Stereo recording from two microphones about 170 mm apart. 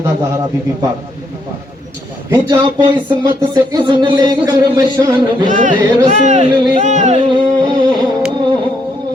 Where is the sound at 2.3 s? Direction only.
20° right (ahead or behind).